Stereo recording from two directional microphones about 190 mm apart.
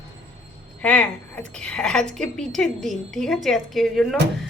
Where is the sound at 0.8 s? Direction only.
5° left (ahead or behind).